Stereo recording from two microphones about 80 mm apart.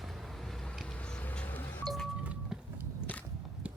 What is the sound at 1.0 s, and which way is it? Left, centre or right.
Telephone dialing, centre.